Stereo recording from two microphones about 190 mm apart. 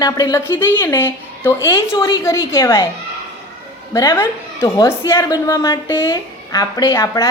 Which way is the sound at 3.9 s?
15° left (ahead or behind).